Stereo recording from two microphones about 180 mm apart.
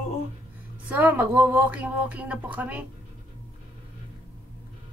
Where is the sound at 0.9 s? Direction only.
10° right (ahead or behind).